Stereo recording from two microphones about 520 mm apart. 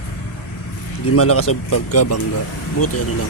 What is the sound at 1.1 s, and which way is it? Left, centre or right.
Speech, left.